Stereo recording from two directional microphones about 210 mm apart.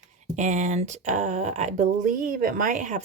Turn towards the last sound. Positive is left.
turn(degrees=-35)  # may be behind; listen again after turning